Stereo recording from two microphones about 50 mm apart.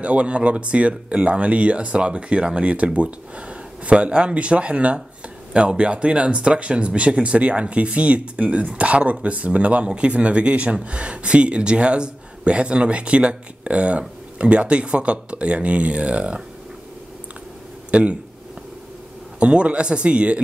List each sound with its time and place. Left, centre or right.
0.0 s speech: right
17.9 s speech: right
19.4 s speech: right